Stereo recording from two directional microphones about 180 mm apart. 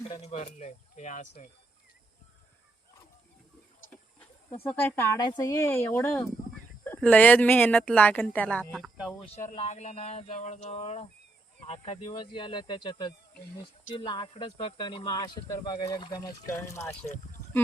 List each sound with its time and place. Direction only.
0.2 s speech: 35° left (ahead or behind)
4.6 s speech: 10° left (ahead or behind)
9.6 s speech: 35° left (ahead or behind); by 17.0 s 15° left (ahead or behind)